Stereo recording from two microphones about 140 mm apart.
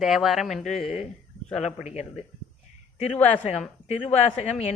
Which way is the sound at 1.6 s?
50° left (ahead or behind).